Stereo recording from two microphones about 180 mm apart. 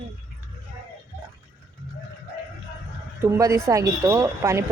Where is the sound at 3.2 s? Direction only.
15° right (ahead or behind).